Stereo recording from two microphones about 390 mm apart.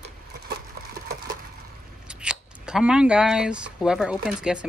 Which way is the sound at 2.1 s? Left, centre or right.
Centre.